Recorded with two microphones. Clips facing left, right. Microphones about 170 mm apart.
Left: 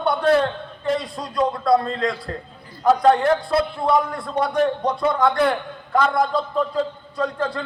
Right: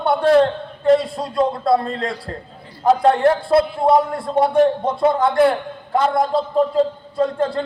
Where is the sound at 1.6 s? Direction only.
25° right (ahead or behind).